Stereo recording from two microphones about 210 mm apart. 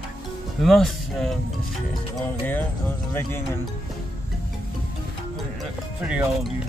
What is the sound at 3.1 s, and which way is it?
Speech, 10° left (ahead or behind).